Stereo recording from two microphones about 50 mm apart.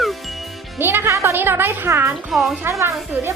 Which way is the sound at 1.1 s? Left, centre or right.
Right.